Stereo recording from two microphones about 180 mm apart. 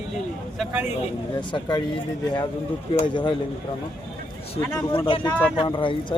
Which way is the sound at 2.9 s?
25° left (ahead or behind).